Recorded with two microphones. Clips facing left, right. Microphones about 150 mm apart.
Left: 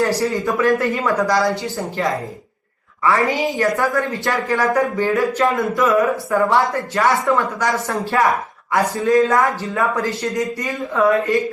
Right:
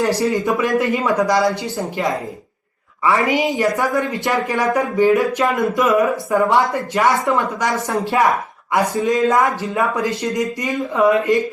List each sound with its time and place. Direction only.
0.2 s a woman's voice: 15° right (ahead or behind)